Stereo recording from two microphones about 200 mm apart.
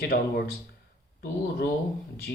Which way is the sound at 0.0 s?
50° left (ahead or behind).